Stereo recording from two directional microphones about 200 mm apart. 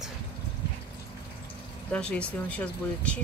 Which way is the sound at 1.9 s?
5° left (ahead or behind).